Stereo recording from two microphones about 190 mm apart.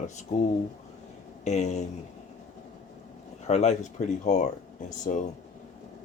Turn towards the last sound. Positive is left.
turn(degrees=40)  # may be behind; listen again after turning